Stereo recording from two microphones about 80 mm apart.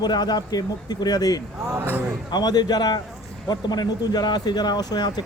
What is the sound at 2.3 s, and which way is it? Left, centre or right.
A man's voice, left.